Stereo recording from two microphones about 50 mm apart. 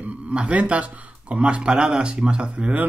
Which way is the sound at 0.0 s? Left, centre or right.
Right.